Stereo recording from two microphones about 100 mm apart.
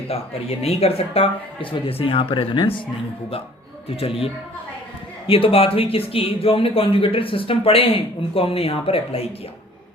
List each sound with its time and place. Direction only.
0.1 s speech: 90° left; by 2.7 s 60° left (ahead or behind)
3.8 s speech: 75° left (ahead or behind)